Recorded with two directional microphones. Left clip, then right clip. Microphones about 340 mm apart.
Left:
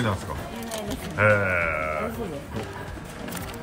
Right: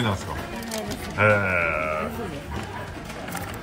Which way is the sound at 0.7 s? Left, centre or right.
Left.